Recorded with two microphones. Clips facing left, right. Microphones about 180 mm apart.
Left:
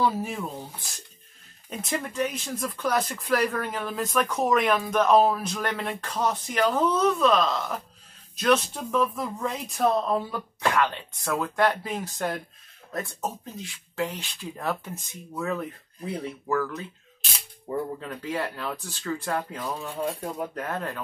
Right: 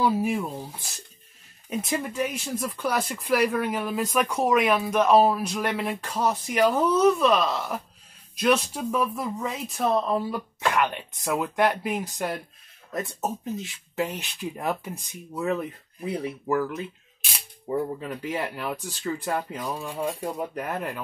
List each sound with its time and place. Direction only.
0.0 s speech: 10° right (ahead or behind)
10.8 s speech: 15° right (ahead or behind)